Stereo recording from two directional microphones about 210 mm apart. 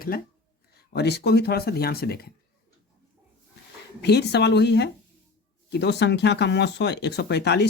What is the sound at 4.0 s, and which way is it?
Speech, 50° left (ahead or behind).